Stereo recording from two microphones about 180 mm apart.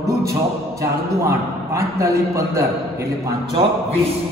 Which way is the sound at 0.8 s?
15° right (ahead or behind).